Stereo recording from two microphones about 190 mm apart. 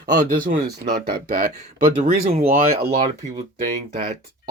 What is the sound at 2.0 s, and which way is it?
Speech, 35° right (ahead or behind).